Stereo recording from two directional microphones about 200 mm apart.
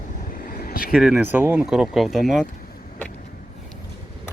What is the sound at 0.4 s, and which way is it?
Vehicle, 50° left (ahead or behind).